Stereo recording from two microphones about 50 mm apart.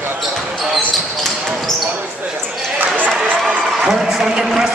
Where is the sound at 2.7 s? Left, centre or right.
Right.